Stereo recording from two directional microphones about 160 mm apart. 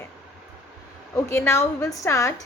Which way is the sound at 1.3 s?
15° left (ahead or behind).